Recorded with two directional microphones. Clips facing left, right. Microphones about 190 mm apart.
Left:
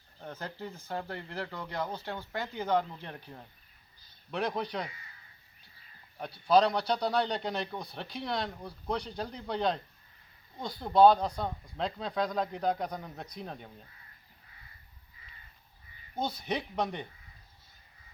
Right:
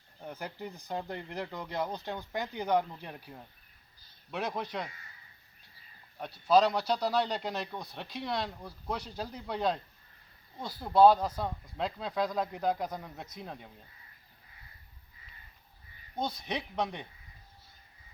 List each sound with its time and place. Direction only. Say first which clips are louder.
0.2 s a man's voice: even; 10° right (ahead or behind)
6.1 s a man's voice: even; centre (ahead or behind)
16.1 s a man's voice: left 2 dB; centre (ahead or behind)